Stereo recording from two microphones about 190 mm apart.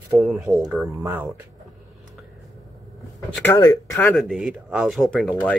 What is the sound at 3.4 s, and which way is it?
Speech, 15° left (ahead or behind).